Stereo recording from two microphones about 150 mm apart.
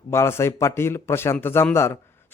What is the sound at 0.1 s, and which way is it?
A man's voice, 15° left (ahead or behind).